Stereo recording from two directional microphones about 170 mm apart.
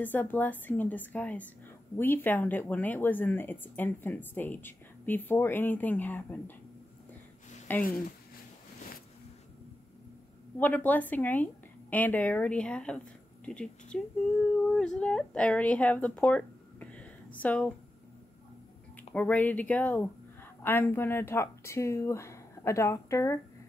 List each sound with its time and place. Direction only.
0.0 s speech: 10° left (ahead or behind)
7.7 s speech: 10° left (ahead or behind)
10.6 s a woman's voice: 10° left (ahead or behind)
19.1 s speech: 10° left (ahead or behind)